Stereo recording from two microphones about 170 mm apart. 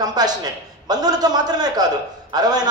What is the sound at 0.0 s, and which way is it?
A man's voice, 25° right (ahead or behind).